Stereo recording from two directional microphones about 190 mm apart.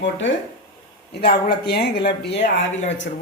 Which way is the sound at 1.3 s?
55° left (ahead or behind).